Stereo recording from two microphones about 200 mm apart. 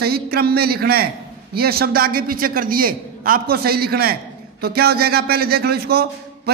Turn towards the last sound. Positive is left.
turn(degrees=-50)  # may be behind; listen again after turning